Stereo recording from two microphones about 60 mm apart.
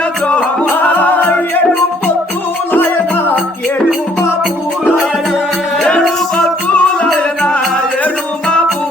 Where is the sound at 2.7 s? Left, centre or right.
Left.